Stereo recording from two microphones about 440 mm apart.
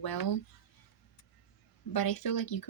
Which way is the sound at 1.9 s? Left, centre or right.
Left.